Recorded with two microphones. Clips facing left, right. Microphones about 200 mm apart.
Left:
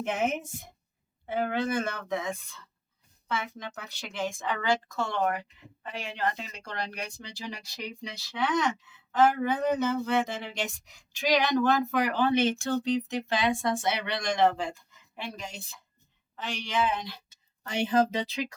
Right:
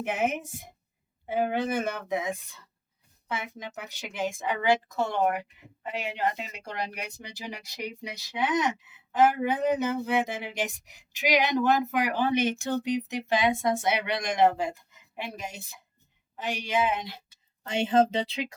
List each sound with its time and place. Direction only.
0.0 s a woman's voice: 10° right (ahead or behind); by 18.5 s 25° right (ahead or behind)